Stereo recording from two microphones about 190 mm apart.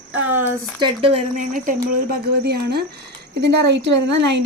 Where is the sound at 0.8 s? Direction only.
30° right (ahead or behind).